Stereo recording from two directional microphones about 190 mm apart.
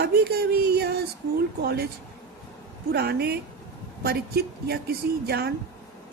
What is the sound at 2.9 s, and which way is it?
Speech, 60° right (ahead or behind).